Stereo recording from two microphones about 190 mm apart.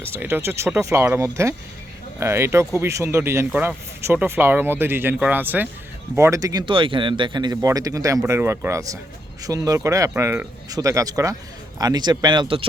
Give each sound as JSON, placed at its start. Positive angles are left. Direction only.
{"t": 0.0, "sound": "speech", "side_deg": -10}